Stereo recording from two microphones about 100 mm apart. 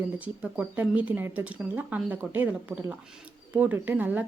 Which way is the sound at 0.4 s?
15° right (ahead or behind).